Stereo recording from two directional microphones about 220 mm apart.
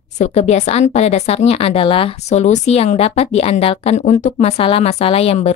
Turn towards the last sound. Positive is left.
turn(degrees=25)  # may be behind; listen again after turning